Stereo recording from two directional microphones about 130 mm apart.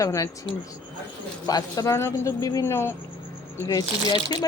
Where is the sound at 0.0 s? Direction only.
25° left (ahead or behind).